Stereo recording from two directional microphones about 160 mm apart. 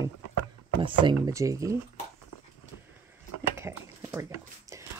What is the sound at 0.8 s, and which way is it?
Speech, 30° right (ahead or behind).